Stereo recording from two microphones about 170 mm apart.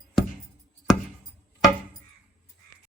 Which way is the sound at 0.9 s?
Centre (ahead or behind).